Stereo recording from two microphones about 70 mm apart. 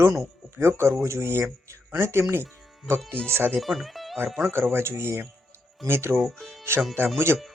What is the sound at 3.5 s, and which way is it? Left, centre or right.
Speech, centre.